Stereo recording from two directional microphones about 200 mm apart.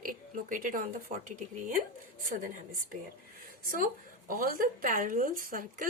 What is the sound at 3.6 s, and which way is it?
A woman's voice, 45° right (ahead or behind).